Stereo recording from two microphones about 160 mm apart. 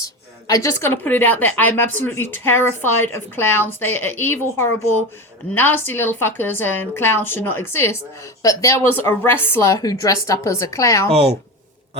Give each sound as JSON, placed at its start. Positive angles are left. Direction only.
{"t": 0.0, "sound": "a woman's voice", "side_deg": 20}
{"t": 11.1, "sound": "speech", "side_deg": -40}